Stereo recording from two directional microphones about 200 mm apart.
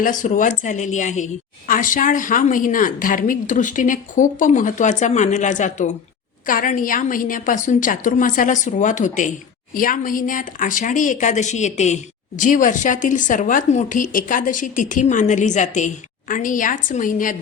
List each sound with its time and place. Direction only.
0.0 s a woman's voice: 40° left (ahead or behind)